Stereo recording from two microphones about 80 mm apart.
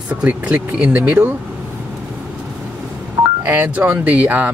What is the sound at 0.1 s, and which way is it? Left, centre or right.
Speech, centre.